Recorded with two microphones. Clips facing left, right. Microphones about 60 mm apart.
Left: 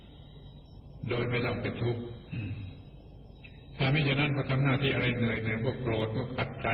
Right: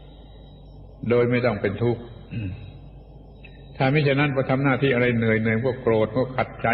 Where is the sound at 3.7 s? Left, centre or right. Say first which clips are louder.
Right 9 dB; right.